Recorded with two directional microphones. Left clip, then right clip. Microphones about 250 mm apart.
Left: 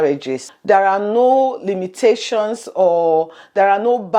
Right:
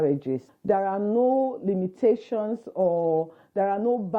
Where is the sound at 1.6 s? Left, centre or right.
Centre.